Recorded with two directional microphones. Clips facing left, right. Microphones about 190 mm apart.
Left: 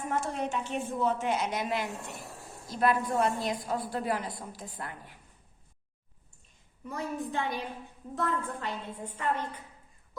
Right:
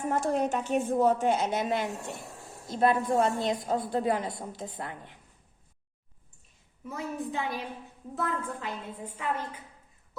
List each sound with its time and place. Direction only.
0.1 s a woman's voice: 40° right (ahead or behind); by 5.1 s 25° right (ahead or behind)
6.8 s a woman's voice: 5° right (ahead or behind)